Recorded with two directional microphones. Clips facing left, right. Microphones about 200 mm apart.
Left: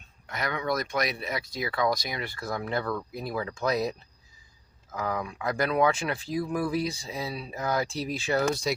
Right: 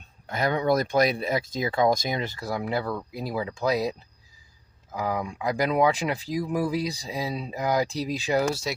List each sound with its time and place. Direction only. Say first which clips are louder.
0.3 s speech: right 6 dB; 30° right (ahead or behind); by 8.7 s 10° right (ahead or behind)